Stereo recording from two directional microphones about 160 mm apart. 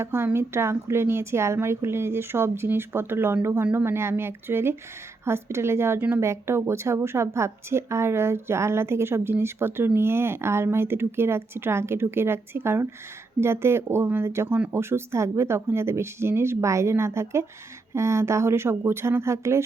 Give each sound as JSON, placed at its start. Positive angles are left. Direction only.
{"t": 0.0, "sound": "speech", "side_deg": -15}